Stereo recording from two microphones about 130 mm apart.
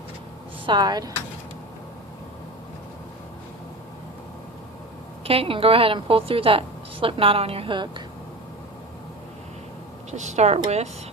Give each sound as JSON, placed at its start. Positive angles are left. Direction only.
{"t": 0.6, "sound": "speech", "side_deg": -35}
{"t": 5.2, "sound": "a woman's voice", "side_deg": -45}
{"t": 10.1, "sound": "a woman's voice", "side_deg": -60}